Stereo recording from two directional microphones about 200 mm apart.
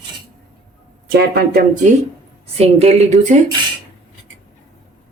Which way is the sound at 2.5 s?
30° right (ahead or behind).